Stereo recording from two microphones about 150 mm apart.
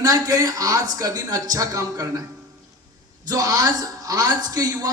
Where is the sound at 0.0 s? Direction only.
20° right (ahead or behind).